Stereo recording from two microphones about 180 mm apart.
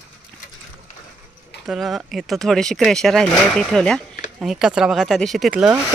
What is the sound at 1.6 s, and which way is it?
Speech, centre (ahead or behind).